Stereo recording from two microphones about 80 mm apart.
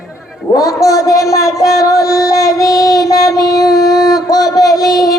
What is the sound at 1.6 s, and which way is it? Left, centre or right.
Music, left.